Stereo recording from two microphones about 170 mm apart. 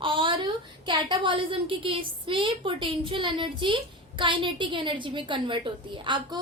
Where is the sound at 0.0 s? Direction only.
30° right (ahead or behind).